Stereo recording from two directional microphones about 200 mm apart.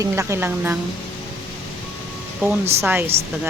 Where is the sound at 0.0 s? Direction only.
15° right (ahead or behind).